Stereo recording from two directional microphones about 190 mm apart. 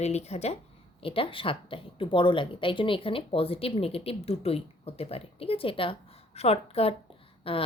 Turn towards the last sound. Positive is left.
turn(degrees=30)  # may be behind; listen again after turning